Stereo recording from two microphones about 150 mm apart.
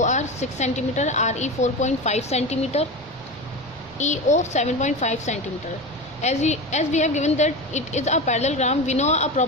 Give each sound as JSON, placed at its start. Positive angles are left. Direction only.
{"t": 0.0, "sound": "a woman's voice", "side_deg": 50}
{"t": 3.9, "sound": "a woman's voice", "side_deg": 50}